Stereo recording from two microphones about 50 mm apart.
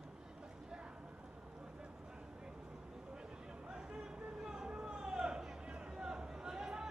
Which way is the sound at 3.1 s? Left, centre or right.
Centre.